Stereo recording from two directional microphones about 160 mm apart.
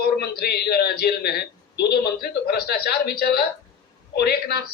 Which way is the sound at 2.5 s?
80° left.